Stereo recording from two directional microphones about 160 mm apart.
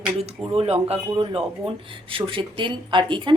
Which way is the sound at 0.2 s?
40° right (ahead or behind).